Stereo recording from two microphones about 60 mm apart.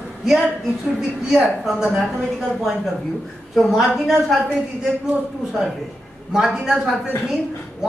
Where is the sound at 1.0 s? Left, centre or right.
Centre.